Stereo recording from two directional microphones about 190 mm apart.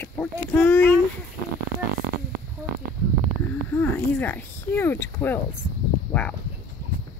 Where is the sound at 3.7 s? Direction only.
10° left (ahead or behind).